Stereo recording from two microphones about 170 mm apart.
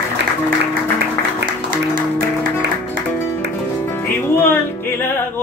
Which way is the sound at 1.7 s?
55° right (ahead or behind).